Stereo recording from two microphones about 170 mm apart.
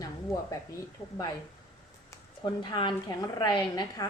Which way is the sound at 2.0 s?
25° left (ahead or behind).